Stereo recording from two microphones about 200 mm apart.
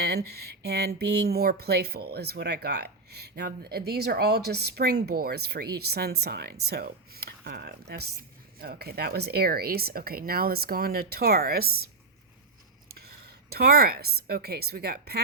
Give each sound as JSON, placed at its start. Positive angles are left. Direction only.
{"t": 0.0, "sound": "speech", "side_deg": -55}
{"t": 13.5, "sound": "speech", "side_deg": -50}